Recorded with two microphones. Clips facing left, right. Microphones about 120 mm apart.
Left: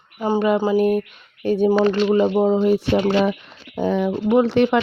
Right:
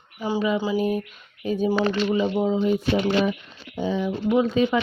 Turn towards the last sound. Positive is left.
turn(degrees=75)  # may be behind; listen again after turning